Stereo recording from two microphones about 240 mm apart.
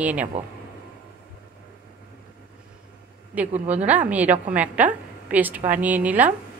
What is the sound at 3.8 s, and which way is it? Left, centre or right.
A woman's voice, centre.